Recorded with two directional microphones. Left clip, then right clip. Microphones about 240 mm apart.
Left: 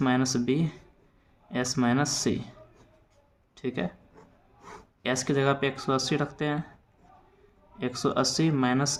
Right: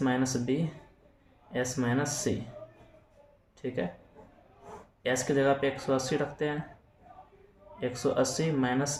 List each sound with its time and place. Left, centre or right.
0.0 s speech: left
3.6 s speech: left
5.0 s speech: left
7.8 s speech: left